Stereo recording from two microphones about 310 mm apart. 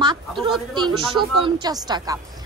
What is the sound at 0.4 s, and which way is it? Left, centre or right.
A woman's voice, centre.